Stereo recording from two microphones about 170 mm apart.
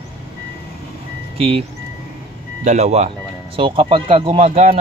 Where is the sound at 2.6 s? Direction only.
40° right (ahead or behind).